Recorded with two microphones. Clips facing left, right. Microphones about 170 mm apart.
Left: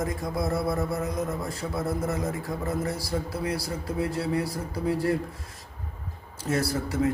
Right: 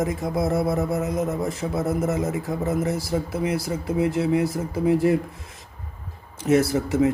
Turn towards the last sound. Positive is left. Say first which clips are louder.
# right 6 dB
turn(degrees=-20)  # may be behind; listen again after turning